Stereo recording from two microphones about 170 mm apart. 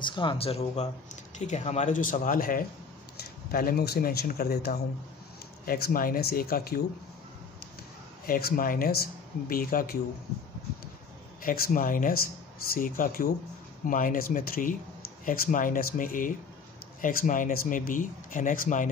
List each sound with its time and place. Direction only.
0.0 s speech: 30° left (ahead or behind); by 6.8 s 60° left (ahead or behind)
8.3 s speech: 60° left (ahead or behind)
11.4 s speech: 55° left (ahead or behind)